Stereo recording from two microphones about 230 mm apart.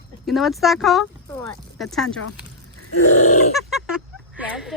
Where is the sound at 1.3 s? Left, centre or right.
Centre.